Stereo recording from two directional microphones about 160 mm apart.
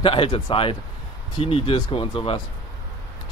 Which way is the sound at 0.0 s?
35° left (ahead or behind).